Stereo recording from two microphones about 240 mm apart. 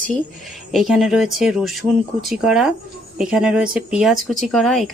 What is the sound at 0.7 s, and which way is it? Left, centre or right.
Speech, centre.